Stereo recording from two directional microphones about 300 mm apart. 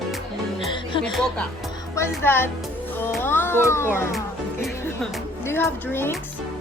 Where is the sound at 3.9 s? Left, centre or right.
Centre.